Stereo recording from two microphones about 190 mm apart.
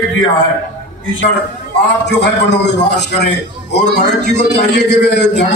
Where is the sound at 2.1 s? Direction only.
65° left (ahead or behind).